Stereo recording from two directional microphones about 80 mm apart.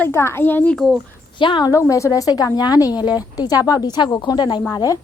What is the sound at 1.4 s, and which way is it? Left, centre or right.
Speech, left.